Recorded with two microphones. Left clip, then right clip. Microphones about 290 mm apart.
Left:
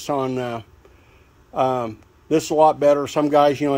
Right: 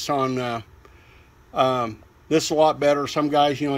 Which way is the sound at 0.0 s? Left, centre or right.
Centre.